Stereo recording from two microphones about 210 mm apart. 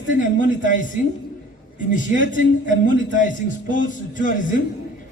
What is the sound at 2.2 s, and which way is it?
A man's voice, 40° left (ahead or behind).